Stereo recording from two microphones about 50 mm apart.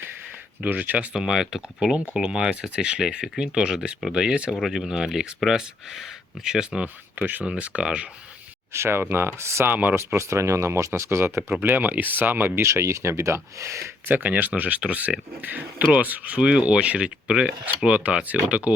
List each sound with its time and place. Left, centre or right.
0.6 s speech: right
1.1 s speech: centre
7.2 s speech: right
7.4 s speech: right
8.7 s speech: right
9.6 s speech: right
9.9 s speech: right
11.6 s speech: right
12.6 s speech: right
14.1 s speech: right